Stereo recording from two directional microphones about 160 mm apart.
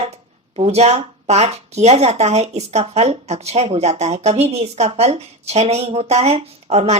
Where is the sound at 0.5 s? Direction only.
40° right (ahead or behind).